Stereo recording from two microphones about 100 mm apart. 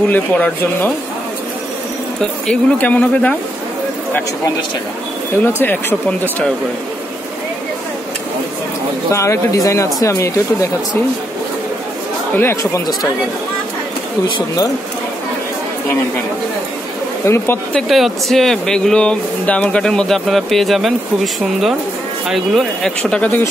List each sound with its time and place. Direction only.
0.1 s speech: 15° left (ahead or behind)
2.4 s speech: 10° left (ahead or behind)
5.4 s speech: 20° left (ahead or behind)
9.1 s speech: 30° left (ahead or behind)
12.4 s speech: 25° left (ahead or behind)
17.2 s speech: 25° left (ahead or behind)
17.7 s speech: centre (ahead or behind)